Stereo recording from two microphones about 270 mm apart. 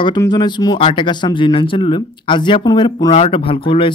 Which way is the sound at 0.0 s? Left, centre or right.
Centre.